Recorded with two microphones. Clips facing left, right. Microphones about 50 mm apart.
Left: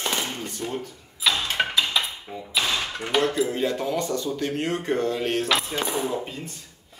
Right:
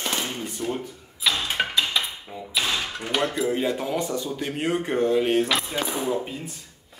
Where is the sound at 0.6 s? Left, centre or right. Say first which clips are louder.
Right 2 dB; centre.